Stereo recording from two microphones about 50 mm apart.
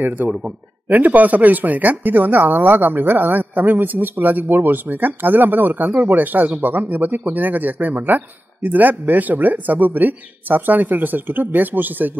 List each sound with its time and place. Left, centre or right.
0.0 s speech: right